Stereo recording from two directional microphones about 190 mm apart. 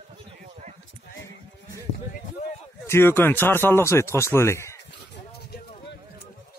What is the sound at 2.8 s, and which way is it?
Speech, 10° left (ahead or behind).